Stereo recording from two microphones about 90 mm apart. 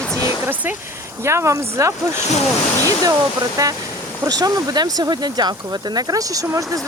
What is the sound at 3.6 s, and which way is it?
Speech, 40° right (ahead or behind).